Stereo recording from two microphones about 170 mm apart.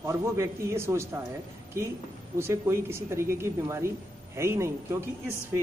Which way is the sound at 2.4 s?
15° right (ahead or behind).